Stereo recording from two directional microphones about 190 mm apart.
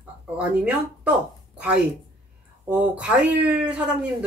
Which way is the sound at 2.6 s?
5° right (ahead or behind).